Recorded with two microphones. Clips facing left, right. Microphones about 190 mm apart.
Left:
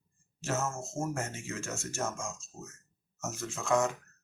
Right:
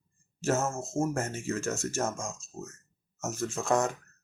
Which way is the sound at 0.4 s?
40° right (ahead or behind).